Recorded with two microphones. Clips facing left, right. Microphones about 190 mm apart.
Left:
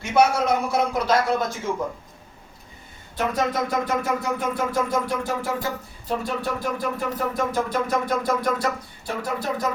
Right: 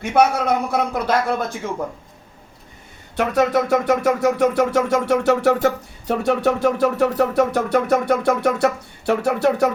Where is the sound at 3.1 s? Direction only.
70° right (ahead or behind).